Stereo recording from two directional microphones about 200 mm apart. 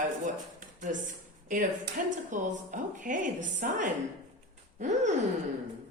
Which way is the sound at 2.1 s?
40° right (ahead or behind).